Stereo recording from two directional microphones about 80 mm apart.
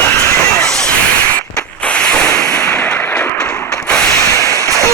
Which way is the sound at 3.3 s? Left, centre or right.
Centre.